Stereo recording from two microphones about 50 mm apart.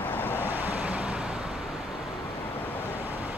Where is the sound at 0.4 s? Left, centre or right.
Right.